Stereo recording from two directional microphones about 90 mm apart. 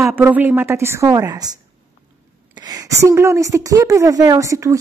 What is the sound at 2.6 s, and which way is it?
A woman's voice, 40° right (ahead or behind).